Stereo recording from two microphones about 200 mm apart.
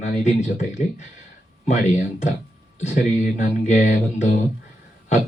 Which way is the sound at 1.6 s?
35° left (ahead or behind).